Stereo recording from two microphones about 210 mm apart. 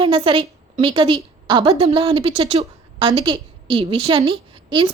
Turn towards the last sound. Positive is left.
turn(degrees=-25)  # may be behind; listen again after turning